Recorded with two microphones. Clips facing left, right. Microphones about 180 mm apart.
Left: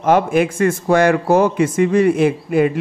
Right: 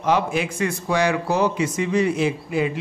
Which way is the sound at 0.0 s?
50° left (ahead or behind).